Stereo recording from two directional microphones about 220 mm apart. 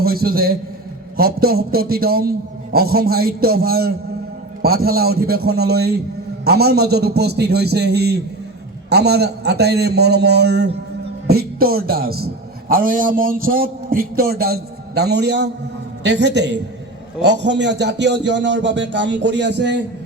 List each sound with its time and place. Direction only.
0.0 s a man's voice: 45° right (ahead or behind)